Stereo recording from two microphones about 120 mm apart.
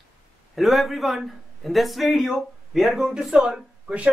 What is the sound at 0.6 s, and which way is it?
A man's voice, centre (ahead or behind).